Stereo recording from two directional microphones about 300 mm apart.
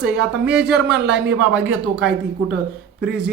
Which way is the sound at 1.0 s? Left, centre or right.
Right.